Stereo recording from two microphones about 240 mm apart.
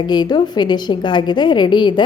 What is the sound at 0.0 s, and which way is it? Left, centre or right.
A woman's voice, centre.